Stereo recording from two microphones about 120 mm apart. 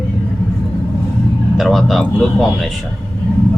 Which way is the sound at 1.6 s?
Centre (ahead or behind).